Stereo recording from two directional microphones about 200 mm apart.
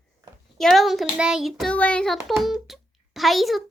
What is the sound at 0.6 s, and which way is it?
A child's voice, centre (ahead or behind).